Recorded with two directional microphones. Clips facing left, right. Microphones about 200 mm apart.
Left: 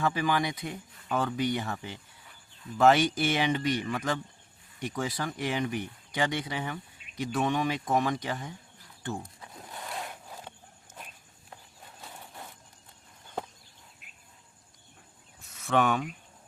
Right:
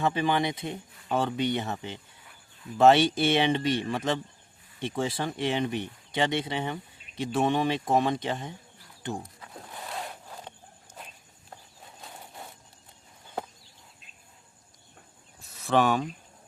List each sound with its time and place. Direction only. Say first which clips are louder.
0.0 s speech: right 2 dB; 25° right (ahead or behind)
15.4 s cricket: right 2 dB; 35° right (ahead or behind)